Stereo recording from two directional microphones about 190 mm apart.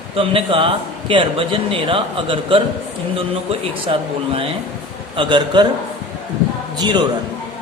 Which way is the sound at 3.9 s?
30° right (ahead or behind).